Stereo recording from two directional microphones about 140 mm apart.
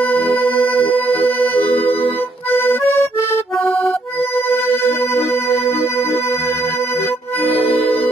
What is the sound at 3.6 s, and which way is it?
Accordion, 5° left (ahead or behind).